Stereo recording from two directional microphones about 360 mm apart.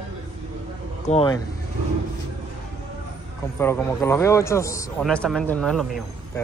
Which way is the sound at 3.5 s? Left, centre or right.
Centre.